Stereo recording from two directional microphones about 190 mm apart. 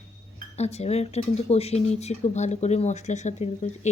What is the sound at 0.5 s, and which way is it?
Speech, 35° left (ahead or behind).